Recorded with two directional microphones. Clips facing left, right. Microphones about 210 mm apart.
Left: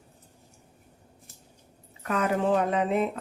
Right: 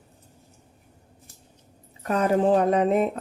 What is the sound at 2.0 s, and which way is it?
Speech, 35° right (ahead or behind).